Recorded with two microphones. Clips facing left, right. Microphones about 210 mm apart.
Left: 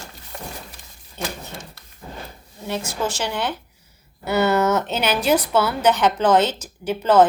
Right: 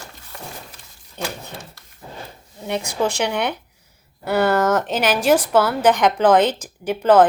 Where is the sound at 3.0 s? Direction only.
65° right (ahead or behind).